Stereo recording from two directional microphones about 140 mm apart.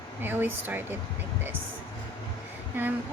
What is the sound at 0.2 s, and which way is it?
Speech, 15° right (ahead or behind).